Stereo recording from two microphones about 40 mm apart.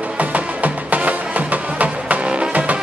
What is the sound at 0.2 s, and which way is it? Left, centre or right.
Music, right.